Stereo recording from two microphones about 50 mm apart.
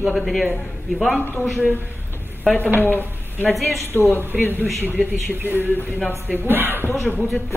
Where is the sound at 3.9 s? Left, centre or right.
Left.